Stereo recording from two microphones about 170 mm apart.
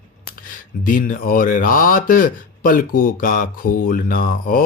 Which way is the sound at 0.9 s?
55° left (ahead or behind).